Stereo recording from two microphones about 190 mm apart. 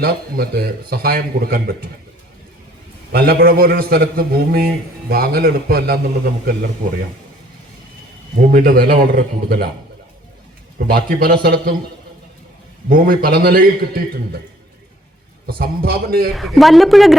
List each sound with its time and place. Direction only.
0.0 s a man's voice: 55° right (ahead or behind)
3.1 s a man's voice: 55° right (ahead or behind)
8.4 s a man's voice: 50° right (ahead or behind)
10.8 s a man's voice: 50° right (ahead or behind)
12.9 s a man's voice: 50° right (ahead or behind)
15.4 s a man's voice: 55° right (ahead or behind)
16.3 s a woman's voice: centre (ahead or behind)